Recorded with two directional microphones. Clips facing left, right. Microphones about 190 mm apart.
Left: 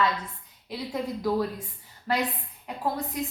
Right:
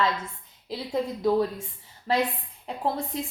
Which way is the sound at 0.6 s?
25° right (ahead or behind).